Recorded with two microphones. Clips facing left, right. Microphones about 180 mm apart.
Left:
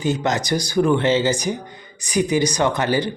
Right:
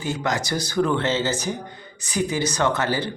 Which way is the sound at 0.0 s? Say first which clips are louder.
Left 4 dB; 20° left (ahead or behind).